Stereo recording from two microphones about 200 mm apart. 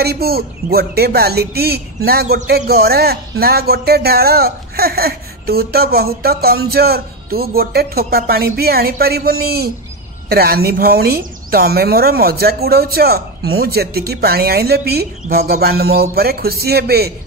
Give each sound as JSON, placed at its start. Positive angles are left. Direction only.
{"t": 0.0, "sound": "speech", "side_deg": -50}